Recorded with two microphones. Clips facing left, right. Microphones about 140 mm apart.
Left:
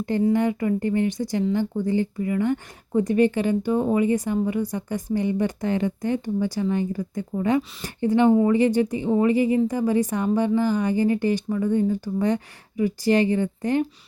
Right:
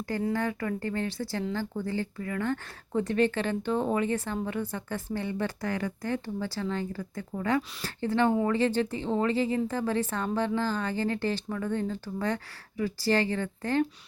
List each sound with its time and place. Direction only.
0.3 s speech: 20° left (ahead or behind)